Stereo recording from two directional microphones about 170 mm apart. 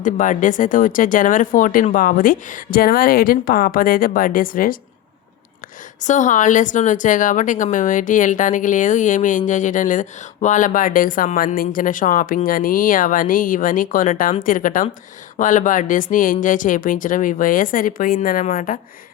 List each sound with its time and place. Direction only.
0.0 s speech: 50° left (ahead or behind)
6.0 s a woman's voice: 45° left (ahead or behind)